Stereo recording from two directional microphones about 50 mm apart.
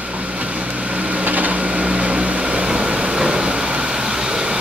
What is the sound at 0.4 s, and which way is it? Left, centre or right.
Vehicle, right.